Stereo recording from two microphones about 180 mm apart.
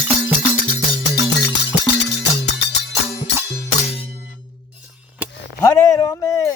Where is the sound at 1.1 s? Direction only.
75° left (ahead or behind).